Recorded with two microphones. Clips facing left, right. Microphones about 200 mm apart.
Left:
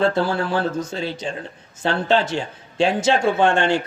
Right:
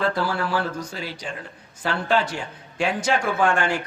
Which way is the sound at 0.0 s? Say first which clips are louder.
Left 4 dB; 25° left (ahead or behind).